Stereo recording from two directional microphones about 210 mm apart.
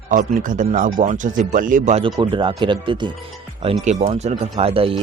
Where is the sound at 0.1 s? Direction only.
40° right (ahead or behind).